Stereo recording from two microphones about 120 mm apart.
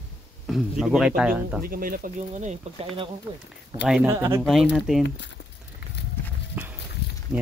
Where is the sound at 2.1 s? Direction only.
85° right.